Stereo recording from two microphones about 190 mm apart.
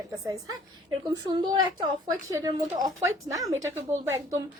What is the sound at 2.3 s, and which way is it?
A woman's voice, 15° right (ahead or behind).